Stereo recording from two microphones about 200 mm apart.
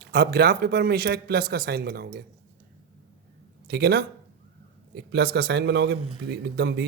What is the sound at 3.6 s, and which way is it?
Speech, 55° right (ahead or behind).